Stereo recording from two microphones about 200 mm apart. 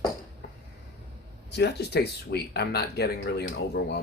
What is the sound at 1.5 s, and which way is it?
Speech, 55° left (ahead or behind).